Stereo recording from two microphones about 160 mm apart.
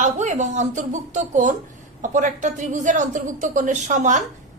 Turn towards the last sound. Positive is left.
turn(degrees=-50)  # may be behind; listen again after turning